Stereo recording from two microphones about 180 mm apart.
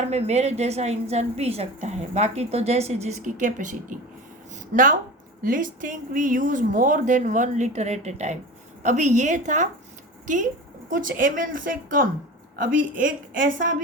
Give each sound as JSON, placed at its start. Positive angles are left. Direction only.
{"t": 0.1, "sound": "a woman's voice", "side_deg": -35}
{"t": 10.8, "sound": "speech", "side_deg": -50}